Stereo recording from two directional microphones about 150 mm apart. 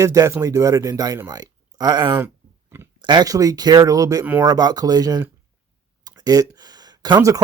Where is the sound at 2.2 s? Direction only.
15° right (ahead or behind).